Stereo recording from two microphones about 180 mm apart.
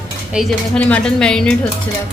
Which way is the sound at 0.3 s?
5° left (ahead or behind).